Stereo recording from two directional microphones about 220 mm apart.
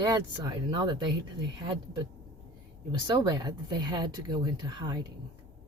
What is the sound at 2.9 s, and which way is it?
Speech, 20° right (ahead or behind).